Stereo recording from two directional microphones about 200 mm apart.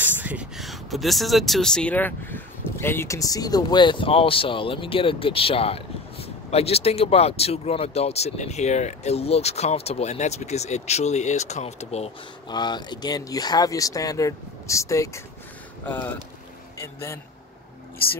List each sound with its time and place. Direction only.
0.0 s a man's voice: 10° right (ahead or behind); by 17.2 s 15° left (ahead or behind)